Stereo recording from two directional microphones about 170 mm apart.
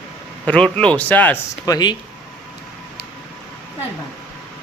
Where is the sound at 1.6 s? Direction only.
25° left (ahead or behind).